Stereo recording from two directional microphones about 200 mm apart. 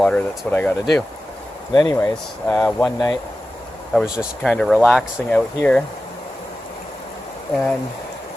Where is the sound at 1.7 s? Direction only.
15° left (ahead or behind).